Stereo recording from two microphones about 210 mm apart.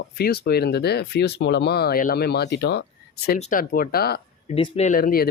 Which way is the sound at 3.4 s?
40° left (ahead or behind).